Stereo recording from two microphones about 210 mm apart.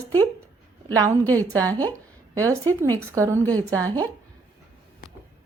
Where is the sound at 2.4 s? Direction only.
15° right (ahead or behind).